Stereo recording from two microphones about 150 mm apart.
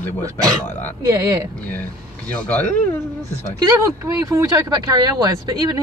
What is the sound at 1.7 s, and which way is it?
Speech, 10° left (ahead or behind).